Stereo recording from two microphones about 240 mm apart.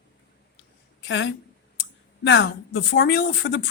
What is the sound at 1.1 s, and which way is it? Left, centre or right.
Speech, left.